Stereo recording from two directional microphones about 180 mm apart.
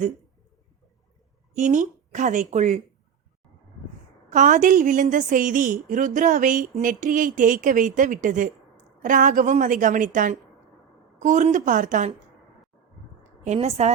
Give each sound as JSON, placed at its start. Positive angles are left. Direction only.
{"t": 1.5, "sound": "a woman's voice", "side_deg": -45}
{"t": 4.3, "sound": "a woman's voice", "side_deg": -45}
{"t": 13.4, "sound": "a woman's voice", "side_deg": -40}